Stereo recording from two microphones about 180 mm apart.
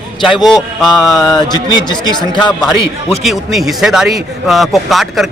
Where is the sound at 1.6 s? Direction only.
25° left (ahead or behind).